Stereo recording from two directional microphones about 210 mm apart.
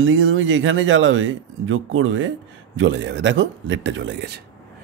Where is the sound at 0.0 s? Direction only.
70° right (ahead or behind).